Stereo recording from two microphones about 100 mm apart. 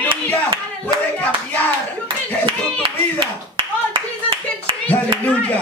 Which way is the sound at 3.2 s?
55° right (ahead or behind).